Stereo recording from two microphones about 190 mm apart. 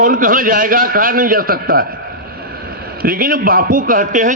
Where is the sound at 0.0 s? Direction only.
45° right (ahead or behind).